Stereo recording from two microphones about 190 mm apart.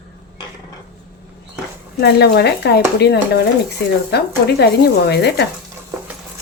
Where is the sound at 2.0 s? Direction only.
60° left (ahead or behind).